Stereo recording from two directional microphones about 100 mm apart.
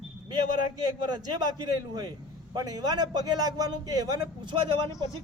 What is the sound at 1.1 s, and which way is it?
A man's voice, 45° right (ahead or behind).